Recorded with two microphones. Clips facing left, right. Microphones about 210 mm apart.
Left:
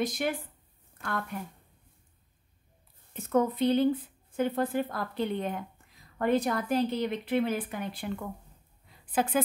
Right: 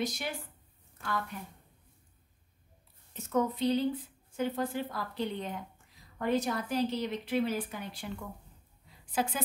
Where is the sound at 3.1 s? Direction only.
55° left (ahead or behind).